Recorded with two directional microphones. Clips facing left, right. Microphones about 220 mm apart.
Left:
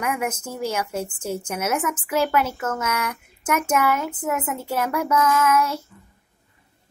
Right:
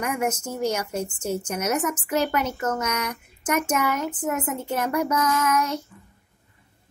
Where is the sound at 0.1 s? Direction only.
5° left (ahead or behind).